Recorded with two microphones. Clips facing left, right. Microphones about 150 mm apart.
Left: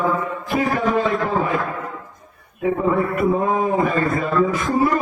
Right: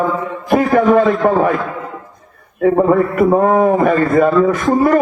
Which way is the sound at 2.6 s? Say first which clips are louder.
Right 7 dB; 60° right (ahead or behind).